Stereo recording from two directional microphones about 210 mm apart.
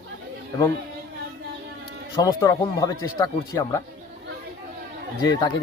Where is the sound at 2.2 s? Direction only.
15° left (ahead or behind).